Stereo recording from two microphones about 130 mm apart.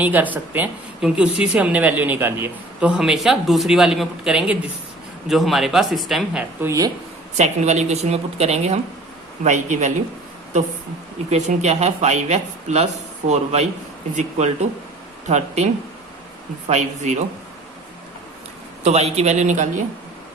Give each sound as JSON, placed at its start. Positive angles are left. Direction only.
{"t": 0.0, "sound": "a woman's voice", "side_deg": -10}
{"t": 6.6, "sound": "speech", "side_deg": -25}
{"t": 7.3, "sound": "speech", "side_deg": -60}
{"t": 9.4, "sound": "speech", "side_deg": -65}
{"t": 11.3, "sound": "speech", "side_deg": -60}
{"t": 16.6, "sound": "speech", "side_deg": -60}
{"t": 18.9, "sound": "speech", "side_deg": -55}